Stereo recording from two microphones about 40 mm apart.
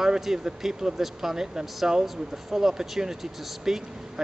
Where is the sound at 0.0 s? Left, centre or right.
Centre.